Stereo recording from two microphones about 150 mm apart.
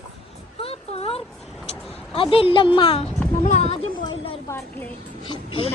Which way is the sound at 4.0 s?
30° left (ahead or behind).